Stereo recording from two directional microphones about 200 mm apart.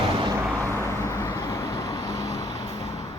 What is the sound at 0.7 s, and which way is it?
Vehicle, 10° left (ahead or behind).